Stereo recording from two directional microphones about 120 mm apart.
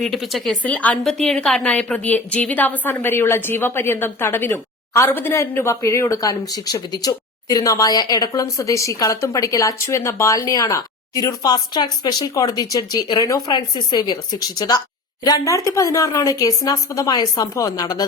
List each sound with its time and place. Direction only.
0.0 s a woman's voice: centre (ahead or behind)
0.6 s a woman's voice: 10° left (ahead or behind); by 18.0 s 30° left (ahead or behind)